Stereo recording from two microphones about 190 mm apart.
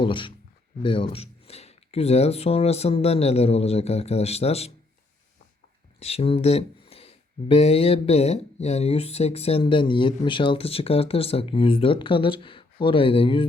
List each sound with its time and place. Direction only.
0.0 s speech: 25° left (ahead or behind)
6.0 s speech: 30° left (ahead or behind)